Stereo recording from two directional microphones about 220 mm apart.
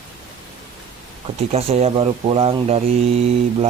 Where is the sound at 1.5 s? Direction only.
30° right (ahead or behind).